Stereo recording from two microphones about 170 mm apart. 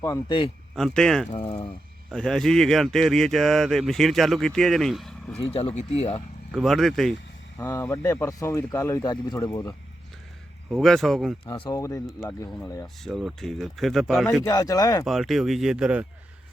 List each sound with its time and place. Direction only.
0.0 s speech: 25° left (ahead or behind)
0.8 s speech: 5° left (ahead or behind)
1.3 s speech: 40° left (ahead or behind)
2.0 s speech: 5° left (ahead or behind)
5.4 s speech: 35° left (ahead or behind)
6.5 s speech: centre (ahead or behind)
7.6 s speech: 15° left (ahead or behind)
10.7 s speech: centre (ahead or behind)
11.4 s speech: 30° left (ahead or behind)
11.7 s speech: 20° left (ahead or behind)
13.0 s speech: centre (ahead or behind)
14.4 s speech: 20° left (ahead or behind)
15.0 s speech: centre (ahead or behind)